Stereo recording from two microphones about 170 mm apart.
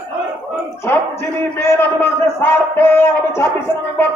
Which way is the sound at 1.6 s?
15° left (ahead or behind).